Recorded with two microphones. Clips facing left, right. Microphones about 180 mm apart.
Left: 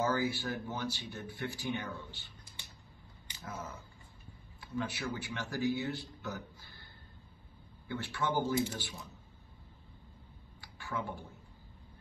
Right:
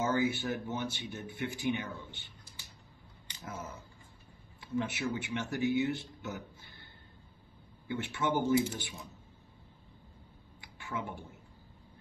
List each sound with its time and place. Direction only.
0.0 s speech: 25° right (ahead or behind)
3.4 s speech: 25° right (ahead or behind)
7.9 s speech: 20° right (ahead or behind)
10.6 s a sound: 20° right (ahead or behind)